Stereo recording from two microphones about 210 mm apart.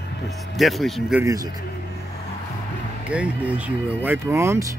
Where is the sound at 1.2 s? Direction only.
15° right (ahead or behind).